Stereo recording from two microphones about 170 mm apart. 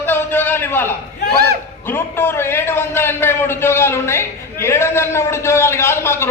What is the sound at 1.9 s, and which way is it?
A man's voice, 15° left (ahead or behind).